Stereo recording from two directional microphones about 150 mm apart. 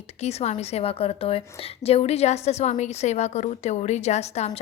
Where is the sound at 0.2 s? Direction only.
45° left (ahead or behind).